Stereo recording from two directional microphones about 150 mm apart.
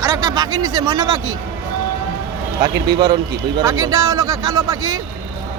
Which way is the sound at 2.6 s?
30° right (ahead or behind).